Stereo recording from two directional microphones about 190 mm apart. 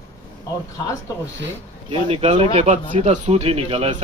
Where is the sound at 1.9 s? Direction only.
30° right (ahead or behind).